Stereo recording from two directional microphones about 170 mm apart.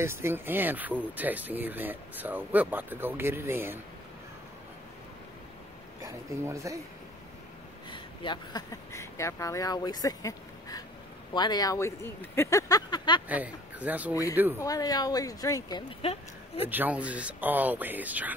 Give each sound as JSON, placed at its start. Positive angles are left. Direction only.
{"t": 0.0, "sound": "speech", "side_deg": -15}
{"t": 6.0, "sound": "speech", "side_deg": -20}
{"t": 7.9, "sound": "speech", "side_deg": 30}
{"t": 13.3, "sound": "speech", "side_deg": -10}
{"t": 14.6, "sound": "speech", "side_deg": 20}
{"t": 16.0, "sound": "a woman's voice", "side_deg": 35}
{"t": 16.6, "sound": "speech", "side_deg": -10}